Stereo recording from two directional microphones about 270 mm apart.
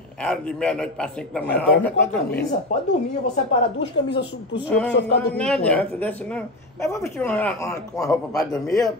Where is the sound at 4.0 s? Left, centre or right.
Left.